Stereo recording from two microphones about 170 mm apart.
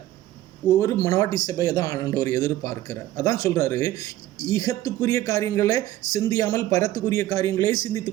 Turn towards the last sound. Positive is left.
turn(degrees=20)  # may be behind; listen again after turning